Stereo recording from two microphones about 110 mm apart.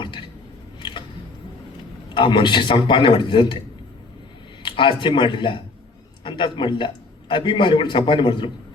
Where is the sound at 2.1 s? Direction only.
50° left (ahead or behind).